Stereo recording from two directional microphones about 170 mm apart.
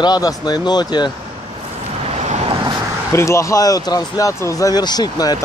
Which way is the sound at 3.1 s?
15° left (ahead or behind).